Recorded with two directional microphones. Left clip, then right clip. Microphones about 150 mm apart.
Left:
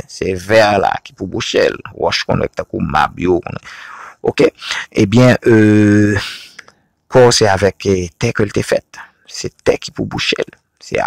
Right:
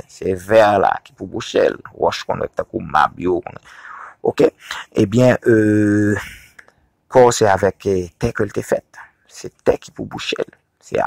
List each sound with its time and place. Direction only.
0.1 s speech: 20° left (ahead or behind)
7.2 s speech: 20° left (ahead or behind)